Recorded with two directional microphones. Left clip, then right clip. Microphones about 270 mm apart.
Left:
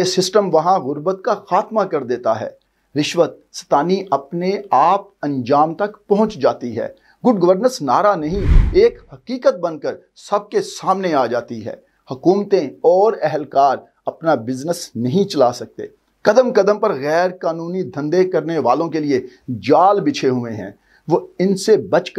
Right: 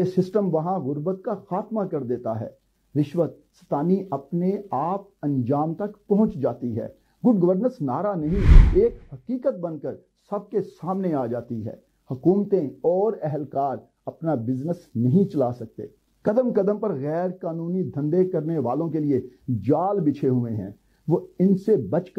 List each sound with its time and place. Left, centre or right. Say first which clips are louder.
0.0 s speech: left 8 dB; centre
7.2 s speech: left 7 dB; left
8.0 s speech: left 10 dB; centre